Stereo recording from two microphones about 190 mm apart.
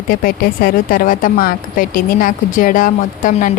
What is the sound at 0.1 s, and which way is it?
A woman's voice, 50° left (ahead or behind).